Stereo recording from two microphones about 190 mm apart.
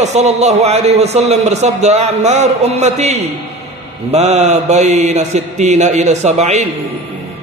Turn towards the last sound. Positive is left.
turn(degrees=-35)  # may be behind; listen again after turning